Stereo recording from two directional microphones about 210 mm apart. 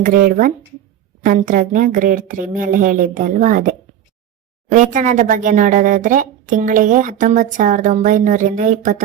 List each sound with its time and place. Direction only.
0.0 s speech: 40° right (ahead or behind)